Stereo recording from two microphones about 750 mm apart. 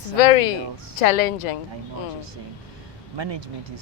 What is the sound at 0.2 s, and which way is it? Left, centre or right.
A woman's voice, left.